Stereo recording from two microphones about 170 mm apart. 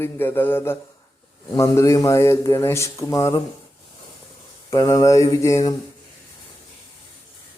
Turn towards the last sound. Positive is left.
turn(degrees=20)  # may be behind; listen again after turning